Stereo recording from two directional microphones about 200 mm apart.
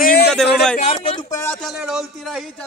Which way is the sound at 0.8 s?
30° left (ahead or behind).